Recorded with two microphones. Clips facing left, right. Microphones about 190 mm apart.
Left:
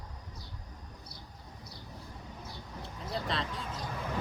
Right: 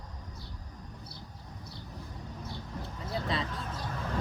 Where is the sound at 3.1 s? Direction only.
Centre (ahead or behind).